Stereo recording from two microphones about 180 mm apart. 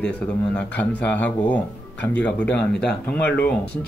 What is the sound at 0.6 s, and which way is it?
Speech, 10° left (ahead or behind).